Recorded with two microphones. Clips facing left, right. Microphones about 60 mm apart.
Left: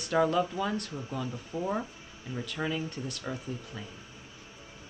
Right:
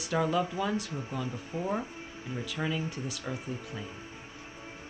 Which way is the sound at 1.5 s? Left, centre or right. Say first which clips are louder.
Left 1 dB; right.